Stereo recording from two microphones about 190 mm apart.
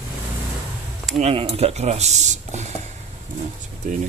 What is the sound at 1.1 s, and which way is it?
Speech, 30° right (ahead or behind).